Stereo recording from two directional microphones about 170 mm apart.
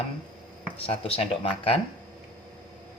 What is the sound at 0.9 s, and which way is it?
Speech, 35° left (ahead or behind).